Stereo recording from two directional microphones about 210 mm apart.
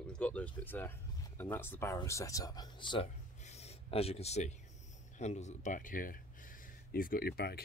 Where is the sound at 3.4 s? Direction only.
30° left (ahead or behind).